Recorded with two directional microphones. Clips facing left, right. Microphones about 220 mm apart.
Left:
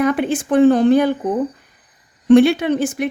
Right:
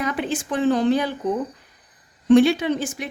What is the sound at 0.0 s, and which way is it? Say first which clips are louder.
A woman's voice: left 8 dB; 55° left (ahead or behind).